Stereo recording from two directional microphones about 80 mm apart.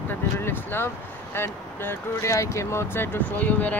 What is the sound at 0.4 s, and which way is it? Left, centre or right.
Speech, left.